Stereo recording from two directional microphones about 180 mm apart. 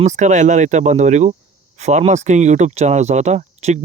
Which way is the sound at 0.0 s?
40° right (ahead or behind).